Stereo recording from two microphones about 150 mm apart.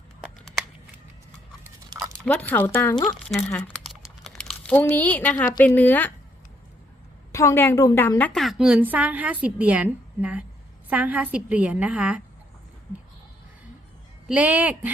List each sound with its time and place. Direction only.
2.2 s a woman's voice: 10° left (ahead or behind)
2.9 s speech: 25° left (ahead or behind)
3.2 s crumpling: 5° left (ahead or behind)
5.5 s a woman's voice: 10° left (ahead or behind)
7.3 s a woman's voice: 20° left (ahead or behind)
8.3 s a woman's voice: centre (ahead or behind)
14.3 s a woman's voice: 10° right (ahead or behind)